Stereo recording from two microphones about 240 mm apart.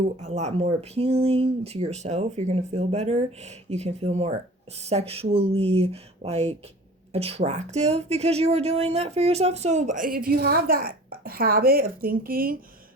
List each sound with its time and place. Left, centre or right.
0.3 s speech: right